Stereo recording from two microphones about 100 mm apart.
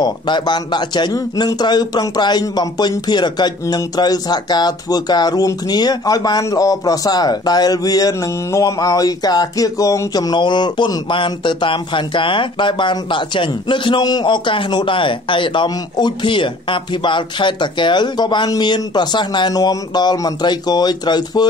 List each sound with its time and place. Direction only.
0.0 s speech: 50° left (ahead or behind)